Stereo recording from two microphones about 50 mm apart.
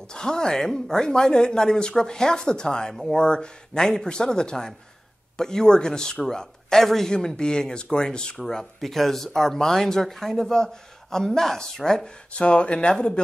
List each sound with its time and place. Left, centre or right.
0.1 s speech: centre
12.3 s speech: left